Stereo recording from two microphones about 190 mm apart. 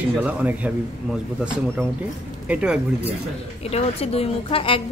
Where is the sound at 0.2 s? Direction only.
5° right (ahead or behind).